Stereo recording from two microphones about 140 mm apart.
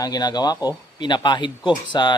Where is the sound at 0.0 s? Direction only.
30° left (ahead or behind).